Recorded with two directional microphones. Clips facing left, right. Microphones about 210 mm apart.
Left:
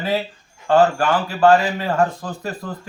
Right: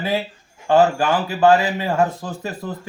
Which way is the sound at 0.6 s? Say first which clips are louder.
Even; 10° right (ahead or behind).